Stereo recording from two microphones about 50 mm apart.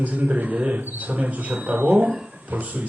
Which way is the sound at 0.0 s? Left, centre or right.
Right.